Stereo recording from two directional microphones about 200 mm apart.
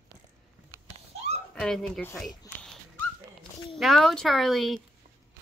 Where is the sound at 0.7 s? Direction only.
10° right (ahead or behind).